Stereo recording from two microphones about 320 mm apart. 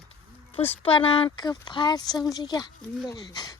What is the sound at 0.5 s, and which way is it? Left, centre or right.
Speech, centre.